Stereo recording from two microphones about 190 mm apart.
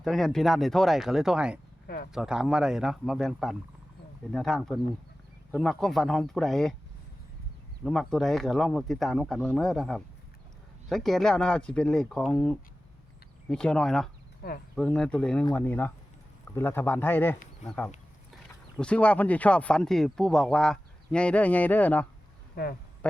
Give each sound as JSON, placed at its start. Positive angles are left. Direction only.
{"t": 0.0, "sound": "speech", "side_deg": 0}
{"t": 7.9, "sound": "speech", "side_deg": 0}
{"t": 14.4, "sound": "speech", "side_deg": 50}
{"t": 14.8, "sound": "speech", "side_deg": 5}